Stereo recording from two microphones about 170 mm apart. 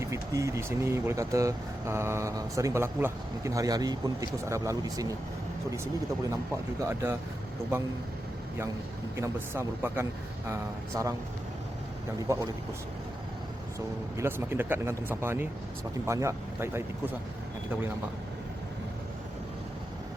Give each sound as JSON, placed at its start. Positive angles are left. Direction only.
{"t": 0.0, "sound": "speech", "side_deg": -15}
{"t": 6.8, "sound": "speech", "side_deg": -15}
{"t": 9.1, "sound": "speech", "side_deg": -15}
{"t": 13.7, "sound": "speech", "side_deg": -15}